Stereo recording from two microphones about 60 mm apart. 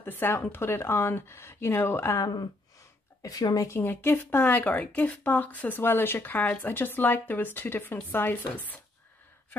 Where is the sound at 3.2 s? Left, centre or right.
Left.